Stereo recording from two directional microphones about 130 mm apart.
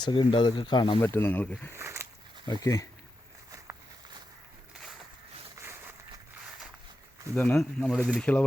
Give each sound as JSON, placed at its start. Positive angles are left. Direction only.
{"t": 0.0, "sound": "speech", "side_deg": 40}
{"t": 1.0, "sound": "speech", "side_deg": 15}
{"t": 1.7, "sound": "speech", "side_deg": -20}
{"t": 2.5, "sound": "speech", "side_deg": 25}
{"t": 3.5, "sound": "a sound", "side_deg": -25}
{"t": 5.6, "sound": "a sound", "side_deg": -25}
{"t": 7.3, "sound": "speech", "side_deg": 10}